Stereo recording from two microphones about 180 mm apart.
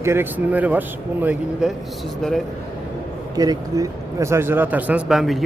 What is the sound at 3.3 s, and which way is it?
Speech, 20° right (ahead or behind).